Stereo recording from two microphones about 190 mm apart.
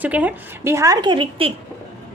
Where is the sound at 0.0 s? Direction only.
10° right (ahead or behind).